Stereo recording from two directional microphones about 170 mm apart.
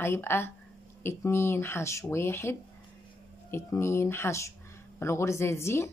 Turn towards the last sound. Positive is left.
turn(degrees=15)  # may be behind; listen again after turning